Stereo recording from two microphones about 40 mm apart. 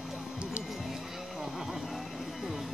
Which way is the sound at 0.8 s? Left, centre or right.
Centre.